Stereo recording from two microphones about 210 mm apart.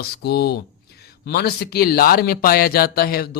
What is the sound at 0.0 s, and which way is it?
Speech, 50° left (ahead or behind).